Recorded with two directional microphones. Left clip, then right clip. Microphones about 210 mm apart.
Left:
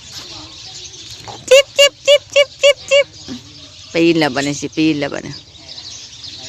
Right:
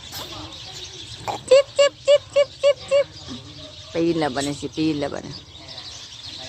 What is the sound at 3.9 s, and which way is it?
Speech, 45° left (ahead or behind).